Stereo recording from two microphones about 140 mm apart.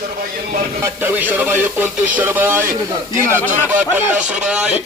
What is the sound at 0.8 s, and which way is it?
Speech, 15° right (ahead or behind).